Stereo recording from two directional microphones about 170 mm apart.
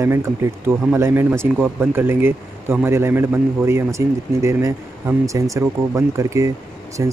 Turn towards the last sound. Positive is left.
turn(degrees=-20)  # may be behind; listen again after turning